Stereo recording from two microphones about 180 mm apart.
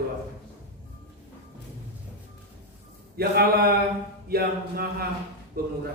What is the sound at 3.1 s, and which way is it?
Mantra, 60° right (ahead or behind).